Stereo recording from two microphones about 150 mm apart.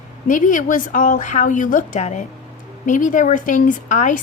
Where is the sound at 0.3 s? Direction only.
60° left (ahead or behind).